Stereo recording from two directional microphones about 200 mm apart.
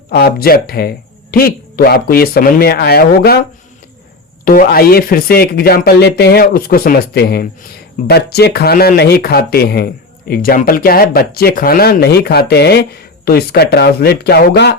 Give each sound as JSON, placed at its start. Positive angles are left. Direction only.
{"t": 0.1, "sound": "speech", "side_deg": 50}
{"t": 4.4, "sound": "speech", "side_deg": 45}